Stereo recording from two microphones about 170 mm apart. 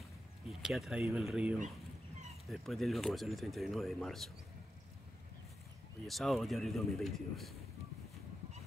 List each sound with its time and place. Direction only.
0.5 s speech: centre (ahead or behind)
6.0 s speech: centre (ahead or behind)